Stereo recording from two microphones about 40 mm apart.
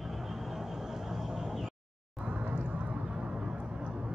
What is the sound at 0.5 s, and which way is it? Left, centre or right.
Vehicle, centre.